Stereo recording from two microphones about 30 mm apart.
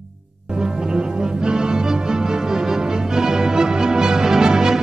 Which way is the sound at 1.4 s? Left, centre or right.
Right.